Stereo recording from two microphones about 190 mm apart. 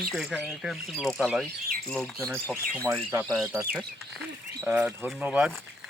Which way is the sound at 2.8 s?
15° right (ahead or behind).